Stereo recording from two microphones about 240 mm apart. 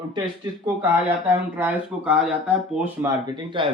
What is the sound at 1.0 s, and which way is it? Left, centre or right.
A man's voice, centre.